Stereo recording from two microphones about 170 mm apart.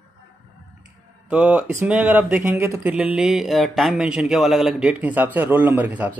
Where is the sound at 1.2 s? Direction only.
5° right (ahead or behind).